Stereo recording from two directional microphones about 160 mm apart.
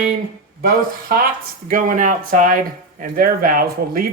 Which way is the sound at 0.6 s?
65° right (ahead or behind).